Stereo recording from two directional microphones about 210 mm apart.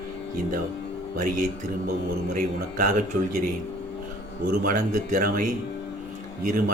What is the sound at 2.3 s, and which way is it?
Speech, 40° right (ahead or behind).